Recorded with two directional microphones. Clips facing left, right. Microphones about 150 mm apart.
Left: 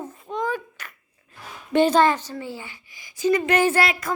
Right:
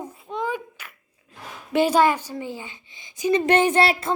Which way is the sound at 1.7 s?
10° right (ahead or behind).